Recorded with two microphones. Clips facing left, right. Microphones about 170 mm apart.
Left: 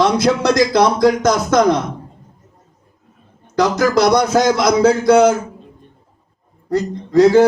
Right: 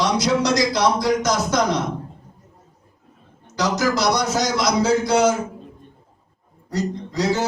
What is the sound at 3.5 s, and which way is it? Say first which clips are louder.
Speech: left 6 dB; 55° left (ahead or behind).